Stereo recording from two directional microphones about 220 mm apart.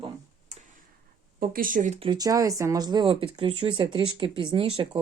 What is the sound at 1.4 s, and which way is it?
Speech, 40° right (ahead or behind).